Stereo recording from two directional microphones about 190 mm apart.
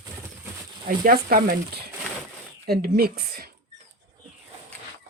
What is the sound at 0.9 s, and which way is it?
Speech, 50° right (ahead or behind).